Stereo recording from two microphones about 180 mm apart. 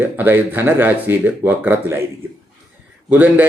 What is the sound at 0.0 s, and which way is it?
Speech, 10° right (ahead or behind).